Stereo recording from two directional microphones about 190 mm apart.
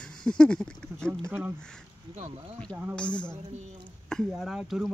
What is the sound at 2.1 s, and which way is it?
Speech, 30° right (ahead or behind).